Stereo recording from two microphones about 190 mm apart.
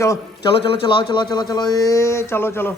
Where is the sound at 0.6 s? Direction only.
30° left (ahead or behind).